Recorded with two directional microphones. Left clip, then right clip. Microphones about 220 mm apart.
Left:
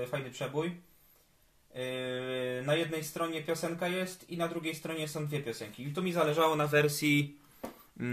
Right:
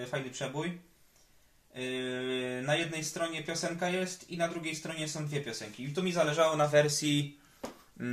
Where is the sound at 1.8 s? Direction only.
40° left (ahead or behind).